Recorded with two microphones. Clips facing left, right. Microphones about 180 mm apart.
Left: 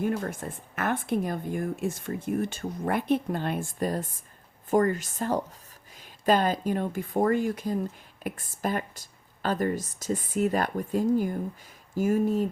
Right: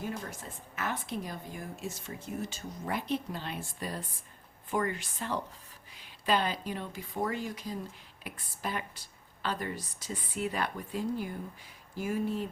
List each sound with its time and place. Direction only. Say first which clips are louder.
0.2 s speech: left 9 dB; 55° left (ahead or behind)